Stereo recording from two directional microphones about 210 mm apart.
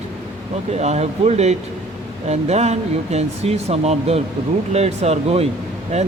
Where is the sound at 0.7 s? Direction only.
30° right (ahead or behind).